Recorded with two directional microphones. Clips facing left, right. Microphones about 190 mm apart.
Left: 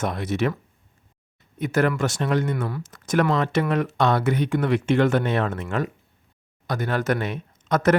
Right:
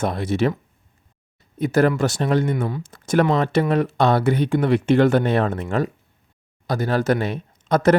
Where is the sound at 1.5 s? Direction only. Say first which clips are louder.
Right 4 dB; 35° right (ahead or behind).